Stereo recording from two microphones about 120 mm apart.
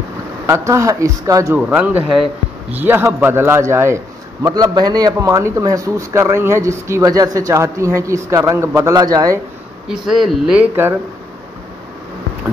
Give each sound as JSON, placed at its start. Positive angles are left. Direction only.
{"t": 0.5, "sound": "a man's voice", "side_deg": -25}
{"t": 1.6, "sound": "a man's voice", "side_deg": -10}
{"t": 9.8, "sound": "speech", "side_deg": 0}